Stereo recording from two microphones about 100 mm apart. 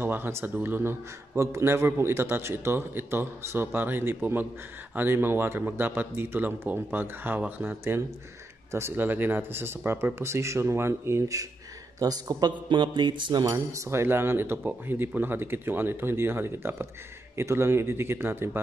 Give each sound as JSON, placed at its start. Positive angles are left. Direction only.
{"t": 0.0, "sound": "a man's voice", "side_deg": -20}
{"t": 13.5, "sound": "a man's voice", "side_deg": -30}